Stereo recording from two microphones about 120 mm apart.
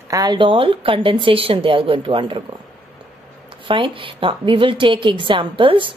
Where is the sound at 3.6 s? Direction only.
45° right (ahead or behind).